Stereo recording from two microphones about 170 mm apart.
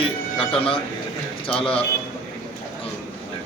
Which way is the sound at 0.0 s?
35° left (ahead or behind).